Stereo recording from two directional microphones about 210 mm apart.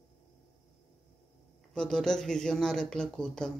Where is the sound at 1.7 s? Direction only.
5° left (ahead or behind).